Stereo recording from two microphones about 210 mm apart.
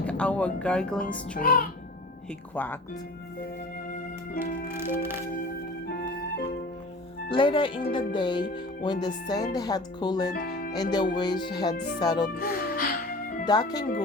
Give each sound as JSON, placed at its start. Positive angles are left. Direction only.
{"t": 0.0, "sound": "speech", "side_deg": 5}
{"t": 1.4, "sound": "a child's voice", "side_deg": 40}
{"t": 2.6, "sound": "speech", "side_deg": 10}
{"t": 4.8, "sound": "music", "side_deg": -10}
{"t": 5.9, "sound": "music", "side_deg": 50}
{"t": 7.3, "sound": "speech", "side_deg": 25}
{"t": 10.3, "sound": "speech", "side_deg": 45}
{"t": 10.9, "sound": "speech", "side_deg": 20}
{"t": 11.7, "sound": "speech", "side_deg": 55}
{"t": 11.9, "sound": "speech", "side_deg": 20}
{"t": 12.3, "sound": "music", "side_deg": 45}
{"t": 13.4, "sound": "speech", "side_deg": 20}